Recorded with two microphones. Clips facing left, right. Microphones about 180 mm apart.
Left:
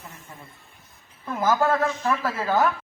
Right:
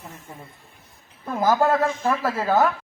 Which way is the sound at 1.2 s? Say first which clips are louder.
Right 2 dB; 35° right (ahead or behind).